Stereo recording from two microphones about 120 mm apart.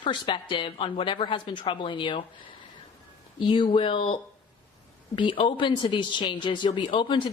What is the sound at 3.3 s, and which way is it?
A woman's voice, 45° left (ahead or behind).